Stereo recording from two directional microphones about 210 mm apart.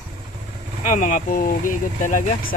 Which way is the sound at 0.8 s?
35° left (ahead or behind).